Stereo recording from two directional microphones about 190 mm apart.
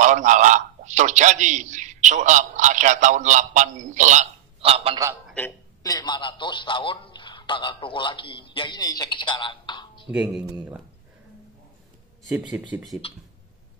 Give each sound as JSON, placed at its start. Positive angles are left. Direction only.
{"t": 0.0, "sound": "a man's voice", "side_deg": -40}
{"t": 5.4, "sound": "a woman's voice", "side_deg": 5}
{"t": 5.8, "sound": "a man's voice", "side_deg": 20}
{"t": 10.0, "sound": "speech", "side_deg": -5}
{"t": 12.3, "sound": "speech", "side_deg": -5}